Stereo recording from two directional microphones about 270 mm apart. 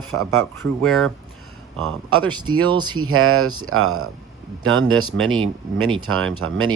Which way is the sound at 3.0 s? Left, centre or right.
Right.